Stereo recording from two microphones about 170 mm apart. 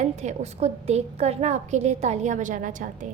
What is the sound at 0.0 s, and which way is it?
A woman's voice, 40° right (ahead or behind).